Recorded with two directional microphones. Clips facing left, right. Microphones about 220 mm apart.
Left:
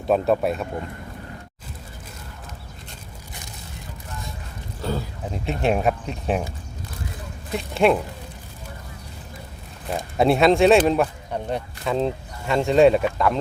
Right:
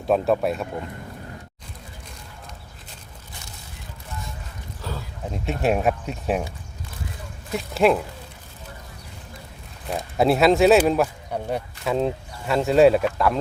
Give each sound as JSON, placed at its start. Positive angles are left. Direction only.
{"t": 0.1, "sound": "speech", "side_deg": 0}
{"t": 4.8, "sound": "a sound", "side_deg": 35}
{"t": 5.3, "sound": "speech", "side_deg": 0}
{"t": 7.5, "sound": "speech", "side_deg": 0}
{"t": 9.9, "sound": "speech", "side_deg": 0}